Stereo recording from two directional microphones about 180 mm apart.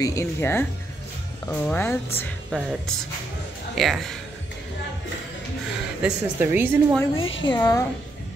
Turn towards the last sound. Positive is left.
turn(degrees=20)  # may be behind; listen again after turning